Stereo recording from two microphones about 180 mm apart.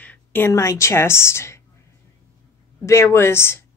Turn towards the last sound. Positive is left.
turn(degrees=15)  # may be behind; listen again after turning